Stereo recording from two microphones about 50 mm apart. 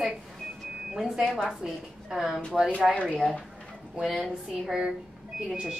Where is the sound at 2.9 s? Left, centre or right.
Left.